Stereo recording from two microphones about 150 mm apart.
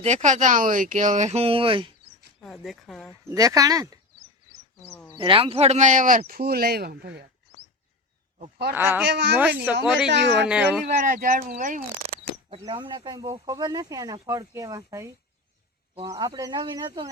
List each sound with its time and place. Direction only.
0.0 s speech: 50° right (ahead or behind)
2.4 s speech: centre (ahead or behind)
3.2 s speech: 25° right (ahead or behind)
5.1 s speech: 35° right (ahead or behind); by 7.3 s 90° right
8.4 s speech: 90° right
8.7 s speech: 15° right (ahead or behind)
10.9 s speech: 65° right (ahead or behind)
12.6 s speech: 30° right (ahead or behind)